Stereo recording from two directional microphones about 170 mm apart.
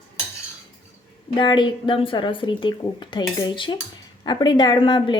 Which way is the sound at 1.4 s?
25° left (ahead or behind).